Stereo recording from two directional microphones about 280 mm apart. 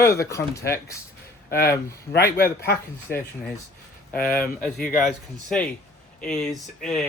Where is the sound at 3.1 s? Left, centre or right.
Left.